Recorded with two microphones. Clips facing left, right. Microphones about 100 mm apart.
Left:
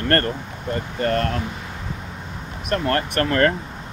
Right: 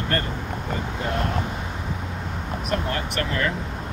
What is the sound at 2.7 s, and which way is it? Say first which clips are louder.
Speech: left 6 dB; 55° left (ahead or behind).